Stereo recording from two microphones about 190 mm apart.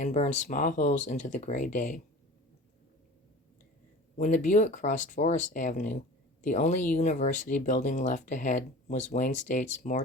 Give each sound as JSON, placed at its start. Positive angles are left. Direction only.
{"t": 0.0, "sound": "speech", "side_deg": 40}
{"t": 4.2, "sound": "speech", "side_deg": 40}